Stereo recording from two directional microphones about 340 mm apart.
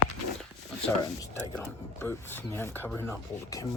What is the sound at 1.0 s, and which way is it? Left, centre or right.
Speech, centre.